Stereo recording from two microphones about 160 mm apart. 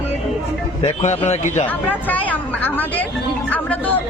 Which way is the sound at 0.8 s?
45° left (ahead or behind).